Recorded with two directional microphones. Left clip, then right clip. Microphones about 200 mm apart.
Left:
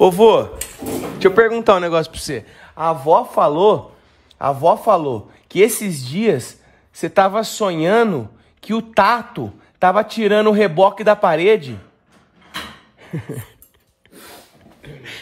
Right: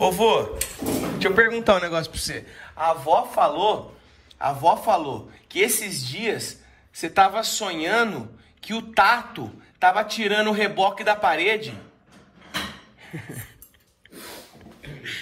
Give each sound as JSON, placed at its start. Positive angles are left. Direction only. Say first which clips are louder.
{"t": 0.0, "sound": "speech", "louder": "left 8 dB", "side_deg": 40}
{"t": 1.2, "sound": "speech", "louder": "left 6 dB", "side_deg": 50}
{"t": 13.0, "sound": "a sound", "louder": "left 8 dB", "side_deg": 50}